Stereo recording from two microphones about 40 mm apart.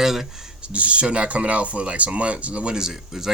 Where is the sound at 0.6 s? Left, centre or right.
Right.